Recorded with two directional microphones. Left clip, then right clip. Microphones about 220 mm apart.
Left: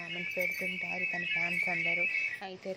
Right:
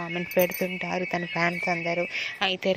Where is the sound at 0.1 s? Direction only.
30° right (ahead or behind).